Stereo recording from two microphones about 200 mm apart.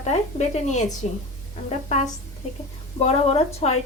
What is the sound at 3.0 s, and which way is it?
Speech, 35° left (ahead or behind).